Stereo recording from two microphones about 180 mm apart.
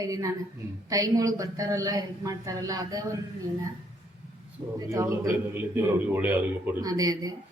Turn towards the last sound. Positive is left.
turn(degrees=-20)  # may be behind; listen again after turning